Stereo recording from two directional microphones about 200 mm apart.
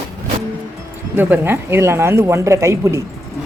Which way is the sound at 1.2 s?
10° right (ahead or behind).